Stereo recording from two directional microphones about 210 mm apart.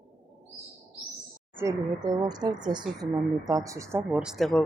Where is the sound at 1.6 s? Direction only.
15° right (ahead or behind).